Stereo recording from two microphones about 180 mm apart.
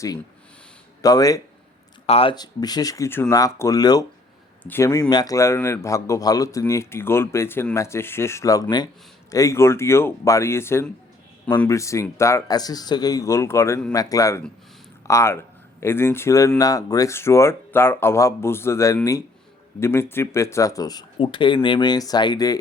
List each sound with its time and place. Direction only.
1.0 s speech: 20° left (ahead or behind)
2.0 s a man's voice: 30° left (ahead or behind)